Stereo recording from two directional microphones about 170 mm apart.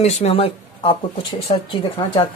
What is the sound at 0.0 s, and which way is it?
Speech, 35° left (ahead or behind).